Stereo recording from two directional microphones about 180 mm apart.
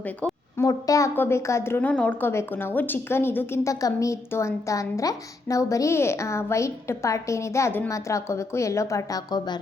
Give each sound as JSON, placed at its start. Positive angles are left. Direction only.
{"t": 0.5, "sound": "a woman's voice", "side_deg": 20}